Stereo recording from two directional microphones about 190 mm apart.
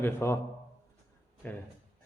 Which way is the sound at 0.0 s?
15° left (ahead or behind).